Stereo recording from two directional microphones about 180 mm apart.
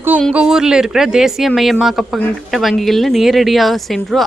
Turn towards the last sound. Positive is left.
turn(degrees=0)  # may be behind; listen again after turning